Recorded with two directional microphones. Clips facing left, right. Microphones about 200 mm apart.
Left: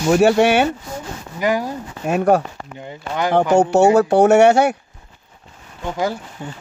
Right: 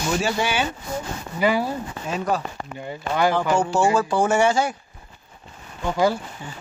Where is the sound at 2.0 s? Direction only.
65° left (ahead or behind).